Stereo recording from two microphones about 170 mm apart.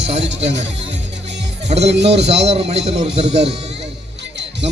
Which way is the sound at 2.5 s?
35° right (ahead or behind).